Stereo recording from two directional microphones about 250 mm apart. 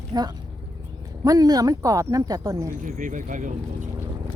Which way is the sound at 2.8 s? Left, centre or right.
Right.